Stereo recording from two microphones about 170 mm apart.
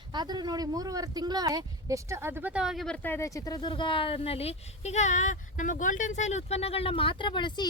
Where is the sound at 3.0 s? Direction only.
15° left (ahead or behind).